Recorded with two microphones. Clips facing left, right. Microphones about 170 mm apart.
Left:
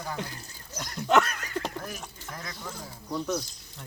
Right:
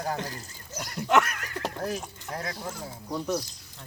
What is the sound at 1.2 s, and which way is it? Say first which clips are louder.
Speech: left 1 dB; 20° left (ahead or behind).